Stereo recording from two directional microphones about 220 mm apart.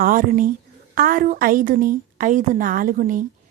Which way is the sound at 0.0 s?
40° right (ahead or behind).